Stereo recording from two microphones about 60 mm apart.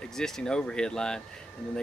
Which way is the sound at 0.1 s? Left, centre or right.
Centre.